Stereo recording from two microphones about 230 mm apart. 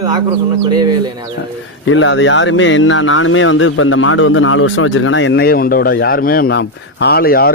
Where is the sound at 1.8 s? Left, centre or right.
Left.